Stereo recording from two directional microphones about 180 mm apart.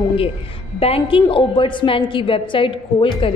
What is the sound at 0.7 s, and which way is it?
A woman's voice, 30° left (ahead or behind).